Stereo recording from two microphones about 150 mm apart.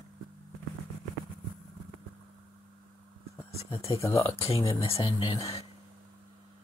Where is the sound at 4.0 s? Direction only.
20° left (ahead or behind).